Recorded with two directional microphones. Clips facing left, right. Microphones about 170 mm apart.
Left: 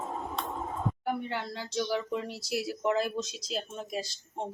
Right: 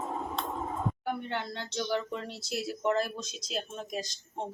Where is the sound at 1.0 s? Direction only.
5° left (ahead or behind).